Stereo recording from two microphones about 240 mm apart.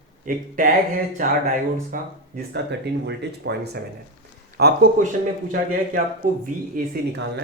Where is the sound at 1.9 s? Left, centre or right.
Right.